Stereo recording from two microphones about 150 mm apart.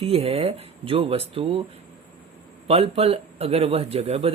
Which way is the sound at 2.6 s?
40° right (ahead or behind).